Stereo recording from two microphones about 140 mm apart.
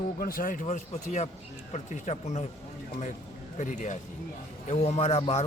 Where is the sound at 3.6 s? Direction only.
60° left (ahead or behind).